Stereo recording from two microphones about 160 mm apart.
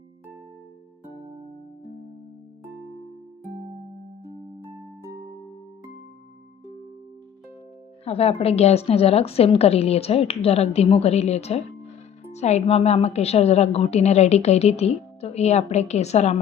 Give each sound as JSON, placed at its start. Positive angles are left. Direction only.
{"t": 8.0, "sound": "a woman's voice", "side_deg": 40}